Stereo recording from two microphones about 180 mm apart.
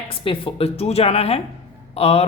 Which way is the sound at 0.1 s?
30° left (ahead or behind).